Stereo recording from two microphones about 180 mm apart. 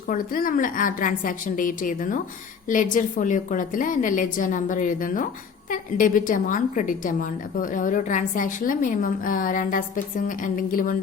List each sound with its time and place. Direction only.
0.1 s a woman's voice: 50° left (ahead or behind)